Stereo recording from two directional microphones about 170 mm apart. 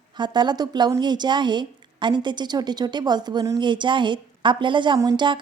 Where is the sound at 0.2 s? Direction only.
25° right (ahead or behind).